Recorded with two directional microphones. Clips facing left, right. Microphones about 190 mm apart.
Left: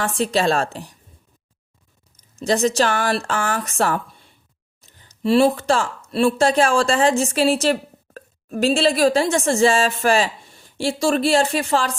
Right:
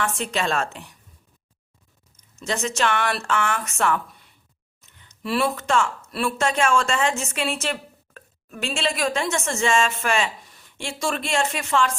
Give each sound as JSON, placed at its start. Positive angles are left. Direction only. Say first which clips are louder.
{"t": 0.2, "sound": "speech", "louder": "left 6 dB", "side_deg": 35}
{"t": 2.4, "sound": "speech", "louder": "left 7 dB", "side_deg": 35}